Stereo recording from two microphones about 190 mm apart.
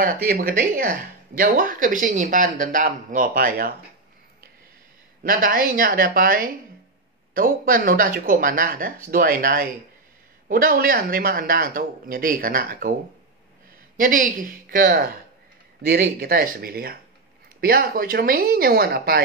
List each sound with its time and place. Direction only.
0.0 s speech: 50° right (ahead or behind)
5.2 s speech: 50° right (ahead or behind)
13.9 s speech: 45° right (ahead or behind)